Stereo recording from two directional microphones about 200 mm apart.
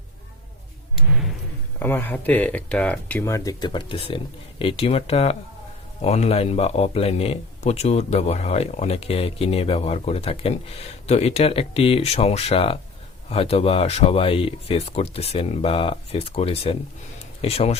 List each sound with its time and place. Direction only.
1.8 s speech: 10° left (ahead or behind); by 17.7 s 30° left (ahead or behind)